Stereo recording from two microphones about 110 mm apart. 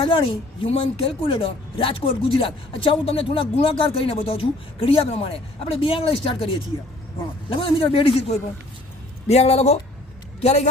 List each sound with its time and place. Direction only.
0.0 s speech: 55° left (ahead or behind)
7.5 s speech: 55° left (ahead or behind)
9.2 s a man's voice: 70° left (ahead or behind)